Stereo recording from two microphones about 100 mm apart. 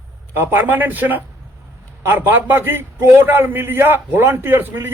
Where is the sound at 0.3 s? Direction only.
20° right (ahead or behind).